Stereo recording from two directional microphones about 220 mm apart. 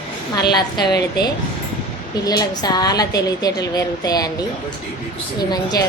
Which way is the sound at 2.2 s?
15° left (ahead or behind).